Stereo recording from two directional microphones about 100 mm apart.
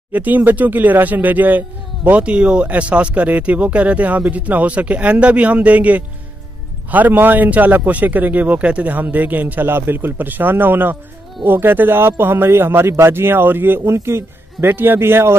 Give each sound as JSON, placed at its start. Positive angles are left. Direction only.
{"t": 0.1, "sound": "a man's voice", "side_deg": -15}